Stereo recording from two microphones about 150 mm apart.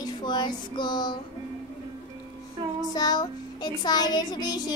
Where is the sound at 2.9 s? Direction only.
25° left (ahead or behind).